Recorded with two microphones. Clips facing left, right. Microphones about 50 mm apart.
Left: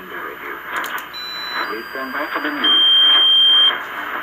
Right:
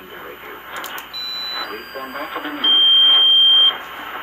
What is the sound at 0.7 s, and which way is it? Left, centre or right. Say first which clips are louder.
Smoke detector: left 5 dB; left.